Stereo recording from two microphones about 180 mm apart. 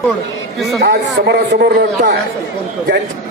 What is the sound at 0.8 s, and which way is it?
A man's voice, 70° right (ahead or behind).